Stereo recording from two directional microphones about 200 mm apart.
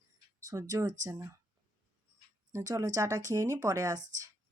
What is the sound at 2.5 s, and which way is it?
Speech, 15° right (ahead or behind).